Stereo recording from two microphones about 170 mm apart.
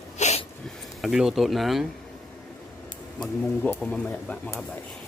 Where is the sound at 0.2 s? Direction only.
40° left (ahead or behind).